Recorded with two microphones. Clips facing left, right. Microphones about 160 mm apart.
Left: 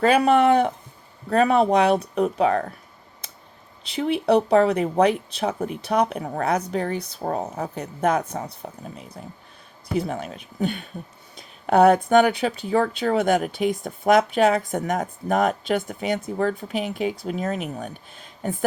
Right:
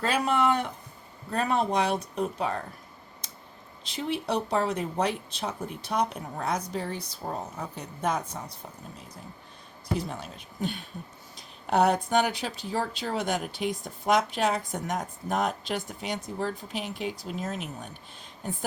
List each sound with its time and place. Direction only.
0.0 s speech: 65° left (ahead or behind)
1.3 s speech: 75° left (ahead or behind)
3.9 s speech: 65° left (ahead or behind)